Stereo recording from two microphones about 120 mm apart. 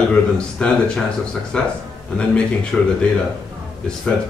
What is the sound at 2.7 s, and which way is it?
Speech, centre (ahead or behind).